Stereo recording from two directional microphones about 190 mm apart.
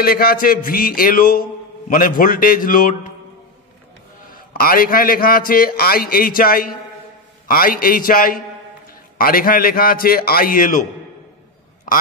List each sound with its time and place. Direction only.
0.0 s a man's voice: 50° left (ahead or behind)
4.3 s a man's voice: 50° left (ahead or behind)
11.9 s quack: 45° left (ahead or behind)